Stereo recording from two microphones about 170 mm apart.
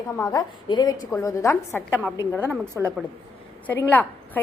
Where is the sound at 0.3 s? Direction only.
25° left (ahead or behind).